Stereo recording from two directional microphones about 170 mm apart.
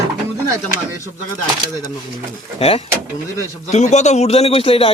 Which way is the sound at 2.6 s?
35° left (ahead or behind).